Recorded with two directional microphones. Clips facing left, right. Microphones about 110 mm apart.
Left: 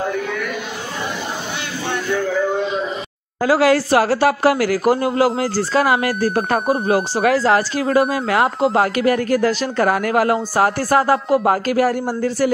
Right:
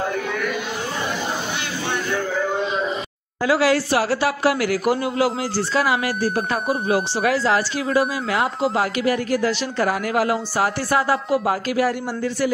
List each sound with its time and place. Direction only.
3.4 s speech: 45° left (ahead or behind)